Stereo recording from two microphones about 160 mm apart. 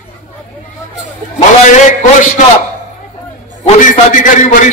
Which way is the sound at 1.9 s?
50° left (ahead or behind).